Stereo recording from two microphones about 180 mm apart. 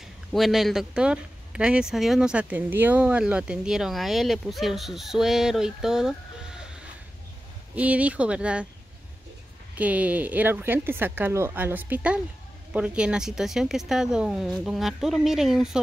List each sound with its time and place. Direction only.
0.3 s speech: centre (ahead or behind)
7.7 s speech: 10° right (ahead or behind)
9.8 s speech: 10° right (ahead or behind)